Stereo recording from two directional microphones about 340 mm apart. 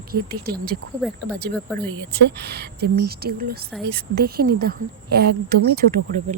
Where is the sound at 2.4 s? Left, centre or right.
Right.